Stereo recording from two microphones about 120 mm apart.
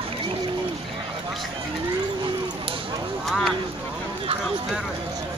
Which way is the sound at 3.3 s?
5° left (ahead or behind).